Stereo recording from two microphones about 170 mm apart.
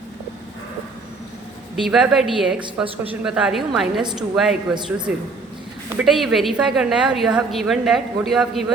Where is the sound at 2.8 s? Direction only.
35° right (ahead or behind).